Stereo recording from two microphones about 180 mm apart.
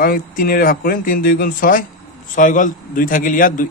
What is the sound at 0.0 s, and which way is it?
A man's voice, 55° left (ahead or behind).